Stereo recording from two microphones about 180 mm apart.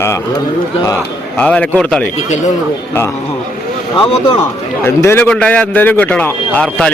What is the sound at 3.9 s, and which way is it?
Speech, 25° left (ahead or behind).